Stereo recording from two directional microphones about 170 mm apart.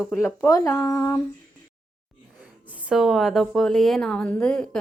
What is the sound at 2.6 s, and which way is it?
A woman's voice, 10° right (ahead or behind).